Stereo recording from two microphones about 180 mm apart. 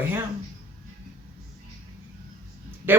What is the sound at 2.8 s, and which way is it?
Speech, 10° right (ahead or behind).